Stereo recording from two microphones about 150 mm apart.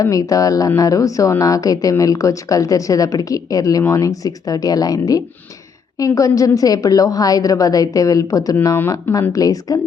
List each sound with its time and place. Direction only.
0.0 s speech: 20° left (ahead or behind)